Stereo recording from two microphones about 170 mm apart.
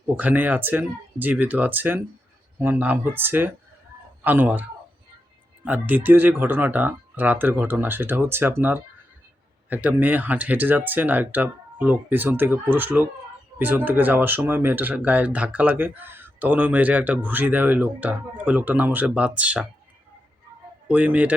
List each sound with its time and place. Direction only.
0.2 s speech: 10° right (ahead or behind)
5.6 s speech: 10° right (ahead or behind)
20.8 s speech: 10° right (ahead or behind)